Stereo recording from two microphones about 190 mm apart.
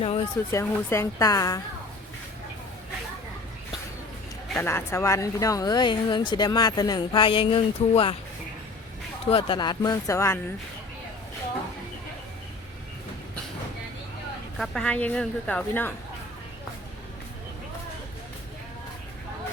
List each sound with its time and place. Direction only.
0.0 s a sound: 30° left (ahead or behind)
0.5 s speech: 15° left (ahead or behind)
4.4 s a sound: 5° left (ahead or behind)
4.7 s speech: 15° left (ahead or behind)
9.2 s speech: 30° left (ahead or behind)
14.6 s speech: 5° left (ahead or behind)